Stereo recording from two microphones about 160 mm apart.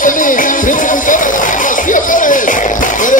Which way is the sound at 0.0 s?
55° left (ahead or behind).